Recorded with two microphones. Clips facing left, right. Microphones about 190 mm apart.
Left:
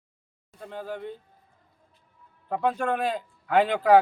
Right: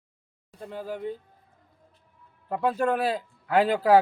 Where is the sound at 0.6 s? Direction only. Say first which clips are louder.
Right 2 dB; 5° right (ahead or behind).